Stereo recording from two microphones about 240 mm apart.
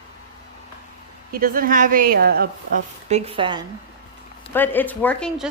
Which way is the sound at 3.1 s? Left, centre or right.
Right.